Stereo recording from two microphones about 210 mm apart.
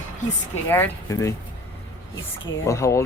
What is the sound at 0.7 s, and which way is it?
Speech, 15° left (ahead or behind).